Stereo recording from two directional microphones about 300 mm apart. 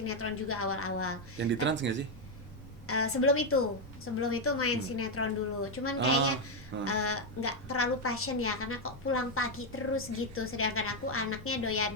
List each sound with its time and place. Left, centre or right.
0.0 s a woman's voice: left
1.4 s speech: right
2.8 s a woman's voice: left